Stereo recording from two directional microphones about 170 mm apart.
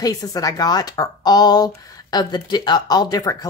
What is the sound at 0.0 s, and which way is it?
Speech, 20° left (ahead or behind).